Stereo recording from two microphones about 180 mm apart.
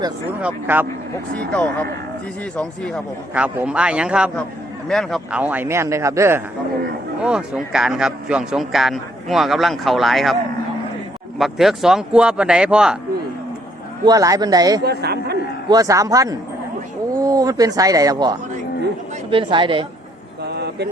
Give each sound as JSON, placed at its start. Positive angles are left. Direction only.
{"t": 0.4, "sound": "a man's voice", "side_deg": -10}
{"t": 1.5, "sound": "speech", "side_deg": 10}
{"t": 3.3, "sound": "a man's voice", "side_deg": -10}
{"t": 7.3, "sound": "speech", "side_deg": -5}
{"t": 11.3, "sound": "speech", "side_deg": 0}
{"t": 14.0, "sound": "speech", "side_deg": -20}
{"t": 14.8, "sound": "speech", "side_deg": -65}
{"t": 15.7, "sound": "speech", "side_deg": -20}
{"t": 20.4, "sound": "a sound", "side_deg": -65}